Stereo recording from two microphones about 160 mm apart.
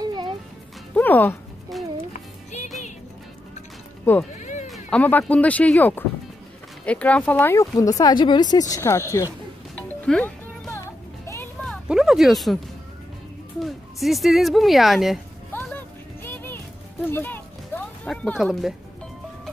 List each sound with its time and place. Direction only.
0.0 s music: 25° right (ahead or behind)
0.9 s speech: 10° left (ahead or behind)
1.7 s a sound: centre (ahead or behind)
2.1 s music: 45° left (ahead or behind)
4.4 s sheep: 50° left (ahead or behind)
4.9 s speech: 10° left (ahead or behind)
10.0 s music: 5° left (ahead or behind)
10.7 s music: 20° left (ahead or behind)
11.6 s a sound: centre (ahead or behind)
13.6 s speech: centre (ahead or behind)
15.5 s music: 15° left (ahead or behind)
17.0 s a sound: 10° left (ahead or behind)